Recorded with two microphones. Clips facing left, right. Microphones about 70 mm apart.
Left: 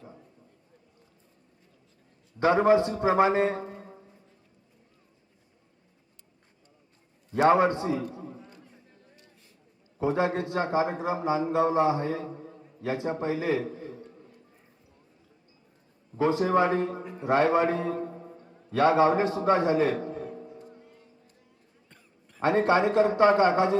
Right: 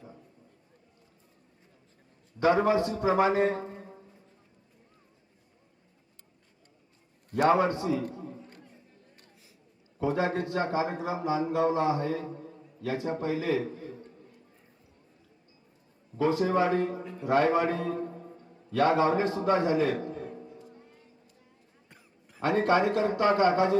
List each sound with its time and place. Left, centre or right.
2.4 s speech: left
3.8 s music: centre
7.4 s speech: left
8.1 s a sound: left
10.3 s a man's voice: left
13.9 s a sound: left
16.1 s speech: left
17.0 s speech: left
18.0 s a man's voice: centre; by 20.0 s left
20.0 s a sound: left
20.3 s music: centre
22.4 s speech: left